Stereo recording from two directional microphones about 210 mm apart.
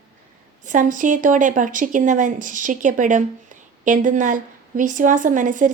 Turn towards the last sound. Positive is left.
turn(degrees=-35)  # may be behind; listen again after turning